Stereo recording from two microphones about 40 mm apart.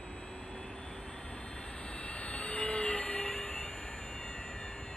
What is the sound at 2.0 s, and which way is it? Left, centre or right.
Train, left.